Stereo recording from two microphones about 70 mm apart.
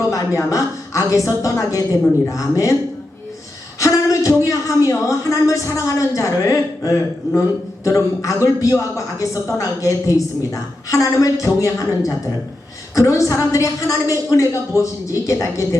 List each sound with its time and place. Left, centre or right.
0.1 s a woman's voice: left
3.8 s a woman's voice: left